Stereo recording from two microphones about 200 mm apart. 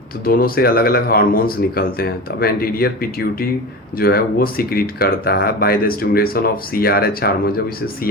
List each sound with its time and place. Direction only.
0.3 s speech: 50° left (ahead or behind)